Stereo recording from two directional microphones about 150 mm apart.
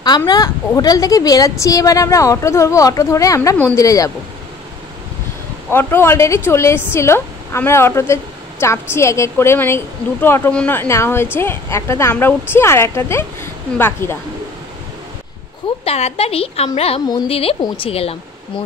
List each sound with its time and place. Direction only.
0.0 s a woman's voice: 30° left (ahead or behind)
5.7 s a woman's voice: 15° left (ahead or behind)
15.8 s a woman's voice: 40° left (ahead or behind)